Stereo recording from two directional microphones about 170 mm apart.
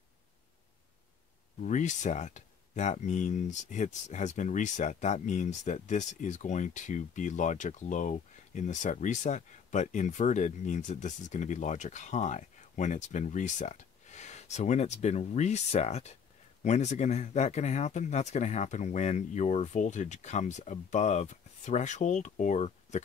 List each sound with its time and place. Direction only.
1.6 s speech: 45° left (ahead or behind)